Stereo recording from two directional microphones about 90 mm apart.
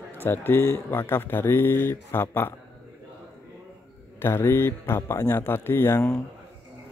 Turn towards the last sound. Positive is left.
turn(degrees=30)  # may be behind; listen again after turning